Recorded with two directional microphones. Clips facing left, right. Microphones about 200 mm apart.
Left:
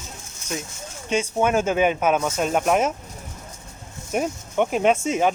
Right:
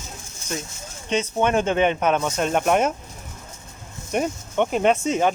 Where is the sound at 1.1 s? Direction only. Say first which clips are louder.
Even; 5° left (ahead or behind).